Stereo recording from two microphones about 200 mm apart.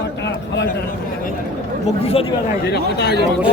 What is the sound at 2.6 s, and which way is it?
Speech, 55° left (ahead or behind).